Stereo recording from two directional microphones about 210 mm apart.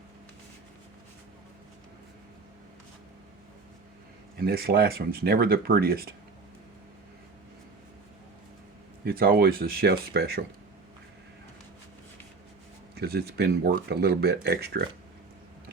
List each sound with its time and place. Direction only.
4.4 s speech: 45° right (ahead or behind)
9.0 s speech: 45° right (ahead or behind)
13.0 s speech: 50° right (ahead or behind)